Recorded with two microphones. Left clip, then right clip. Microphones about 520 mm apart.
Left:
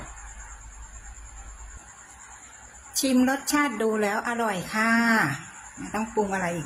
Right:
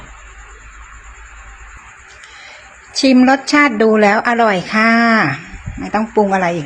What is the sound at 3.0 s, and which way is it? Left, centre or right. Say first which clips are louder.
A woman's voice: right 13 dB; left.